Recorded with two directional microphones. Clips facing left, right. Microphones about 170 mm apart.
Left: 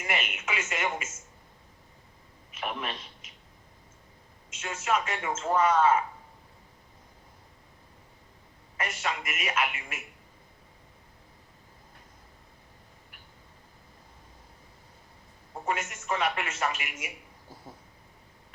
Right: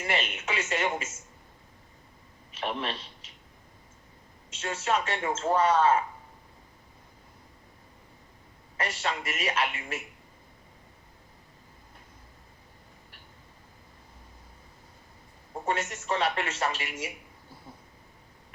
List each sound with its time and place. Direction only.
0.0 s a man's voice: 30° right (ahead or behind)
2.5 s a man's voice: 30° right (ahead or behind)
4.5 s a man's voice: 30° right (ahead or behind)
8.8 s a man's voice: 30° right (ahead or behind)
15.6 s a man's voice: 30° right (ahead or behind)